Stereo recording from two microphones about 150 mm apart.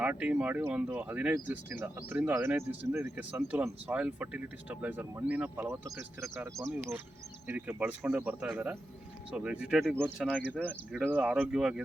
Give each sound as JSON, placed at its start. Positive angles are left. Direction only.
{"t": 0.0, "sound": "speech", "side_deg": -10}